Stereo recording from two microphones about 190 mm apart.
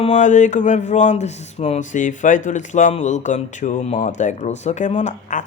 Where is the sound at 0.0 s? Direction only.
40° left (ahead or behind).